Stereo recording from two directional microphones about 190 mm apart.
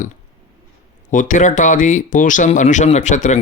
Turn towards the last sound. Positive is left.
turn(degrees=40)  # may be behind; listen again after turning